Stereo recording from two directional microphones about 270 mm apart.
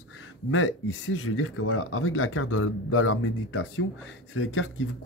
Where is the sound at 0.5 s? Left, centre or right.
Left.